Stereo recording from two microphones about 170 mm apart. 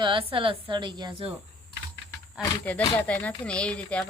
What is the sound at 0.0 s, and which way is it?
A woman's voice, 30° right (ahead or behind).